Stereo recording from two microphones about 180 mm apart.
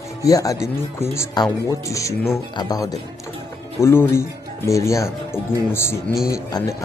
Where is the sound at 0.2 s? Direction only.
20° left (ahead or behind).